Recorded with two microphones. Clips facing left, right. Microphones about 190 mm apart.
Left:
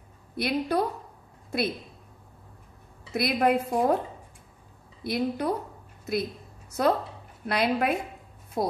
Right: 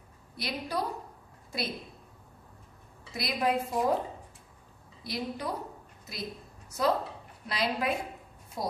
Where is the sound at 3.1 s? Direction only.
55° left (ahead or behind).